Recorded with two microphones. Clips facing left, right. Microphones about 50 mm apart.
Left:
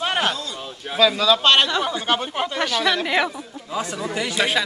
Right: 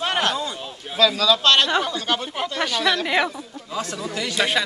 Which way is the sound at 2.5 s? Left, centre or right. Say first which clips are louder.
Even; centre.